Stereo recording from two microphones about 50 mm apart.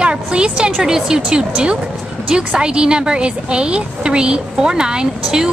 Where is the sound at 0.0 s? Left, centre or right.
Centre.